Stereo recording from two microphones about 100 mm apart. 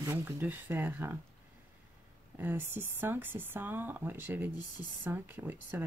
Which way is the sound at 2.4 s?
20° right (ahead or behind).